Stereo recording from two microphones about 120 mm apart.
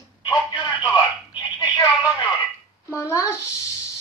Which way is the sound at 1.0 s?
35° left (ahead or behind).